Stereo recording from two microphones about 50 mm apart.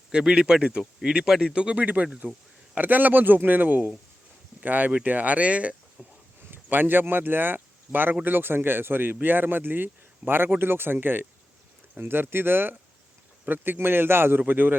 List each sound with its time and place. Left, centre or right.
0.1 s speech: centre
2.7 s a man's voice: right
6.0 s a sound: right
6.4 s a man's voice: right